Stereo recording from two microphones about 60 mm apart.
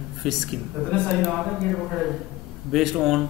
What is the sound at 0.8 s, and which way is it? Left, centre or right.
Speech, left.